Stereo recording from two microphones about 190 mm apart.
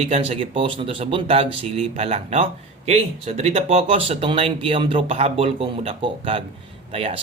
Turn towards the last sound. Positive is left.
turn(degrees=-30)  # may be behind; listen again after turning